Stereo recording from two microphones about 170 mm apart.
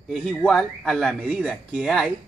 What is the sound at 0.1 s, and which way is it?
A man's voice, centre (ahead or behind).